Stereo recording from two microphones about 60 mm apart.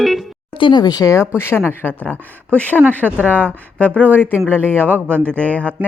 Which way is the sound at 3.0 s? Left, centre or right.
Right.